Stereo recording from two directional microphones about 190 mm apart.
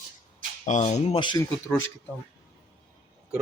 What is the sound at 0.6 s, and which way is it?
Speech, 35° left (ahead or behind).